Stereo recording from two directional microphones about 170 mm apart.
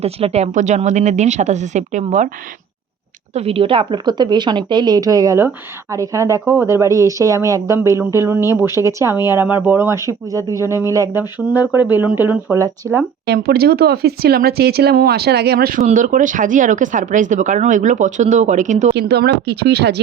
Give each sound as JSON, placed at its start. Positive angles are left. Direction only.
{"t": 0.0, "sound": "speech", "side_deg": -40}
{"t": 3.3, "sound": "a woman's voice", "side_deg": -35}
{"t": 13.2, "sound": "speech", "side_deg": -70}
{"t": 15.8, "sound": "speech", "side_deg": -45}
{"t": 18.9, "sound": "speech", "side_deg": -75}